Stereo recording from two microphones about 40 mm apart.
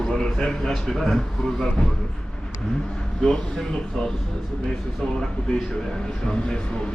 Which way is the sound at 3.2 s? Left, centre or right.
Centre.